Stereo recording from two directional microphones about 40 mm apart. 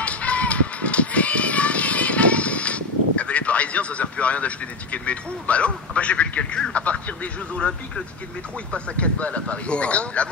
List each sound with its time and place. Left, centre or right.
0.0 s music: left
6.7 s speech: left